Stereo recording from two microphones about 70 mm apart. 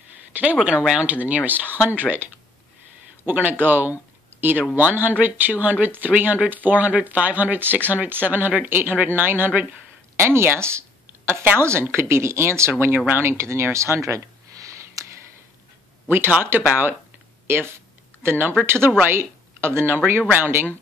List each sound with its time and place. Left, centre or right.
0.3 s speech: right
0.6 s speech: centre
3.3 s speech: right
10.2 s speech: right
16.1 s speech: right
17.5 s a sound: right
18.9 s speech: right